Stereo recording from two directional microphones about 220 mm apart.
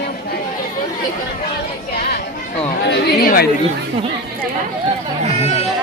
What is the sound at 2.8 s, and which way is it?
Speech, 45° left (ahead or behind).